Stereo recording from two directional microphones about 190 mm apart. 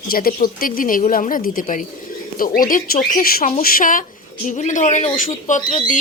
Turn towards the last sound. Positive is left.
turn(degrees=40)  # may be behind; listen again after turning